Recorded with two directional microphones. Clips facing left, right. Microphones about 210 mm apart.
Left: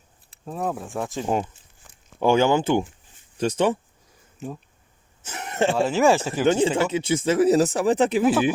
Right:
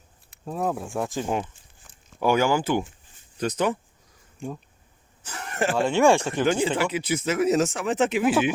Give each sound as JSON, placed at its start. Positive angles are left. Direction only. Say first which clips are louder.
{"t": 0.4, "sound": "speech", "louder": "right 1 dB", "side_deg": 0}
{"t": 2.2, "sound": "speech", "louder": "left 3 dB", "side_deg": 25}
{"t": 4.4, "sound": "speech", "louder": "even", "side_deg": 5}
{"t": 5.2, "sound": "a sound", "louder": "left 4 dB", "side_deg": 20}
{"t": 5.7, "sound": "speech", "louder": "right 1 dB", "side_deg": 5}
{"t": 6.4, "sound": "speech", "louder": "left 3 dB", "side_deg": 25}